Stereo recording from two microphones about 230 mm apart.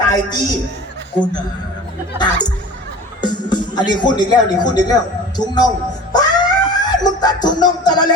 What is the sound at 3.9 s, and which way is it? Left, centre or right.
Speech, centre.